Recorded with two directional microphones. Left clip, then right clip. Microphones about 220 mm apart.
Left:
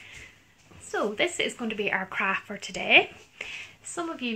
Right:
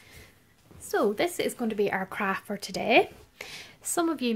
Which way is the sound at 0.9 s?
45° right (ahead or behind).